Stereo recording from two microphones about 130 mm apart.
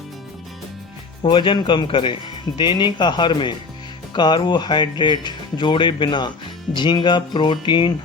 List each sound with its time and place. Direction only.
1.2 s speech: 40° left (ahead or behind)